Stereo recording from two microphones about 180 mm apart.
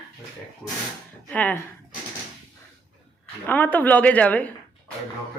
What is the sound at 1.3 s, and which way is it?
Speech, 10° left (ahead or behind).